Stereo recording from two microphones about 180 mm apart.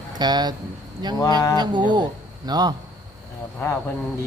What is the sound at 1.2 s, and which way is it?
Speech, 20° left (ahead or behind).